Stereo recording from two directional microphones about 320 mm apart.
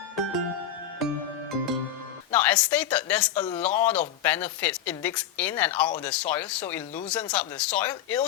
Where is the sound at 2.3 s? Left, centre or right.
Centre.